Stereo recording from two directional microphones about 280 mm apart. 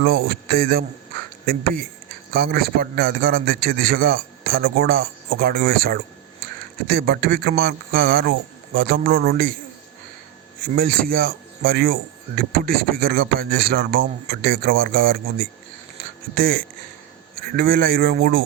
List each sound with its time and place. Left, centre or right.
0.0 s speech: right
10.7 s speech: right